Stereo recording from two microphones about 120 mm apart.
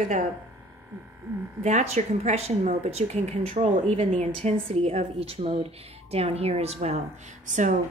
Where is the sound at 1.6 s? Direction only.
75° right (ahead or behind).